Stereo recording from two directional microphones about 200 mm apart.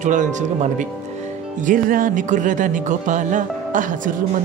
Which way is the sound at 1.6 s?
45° right (ahead or behind).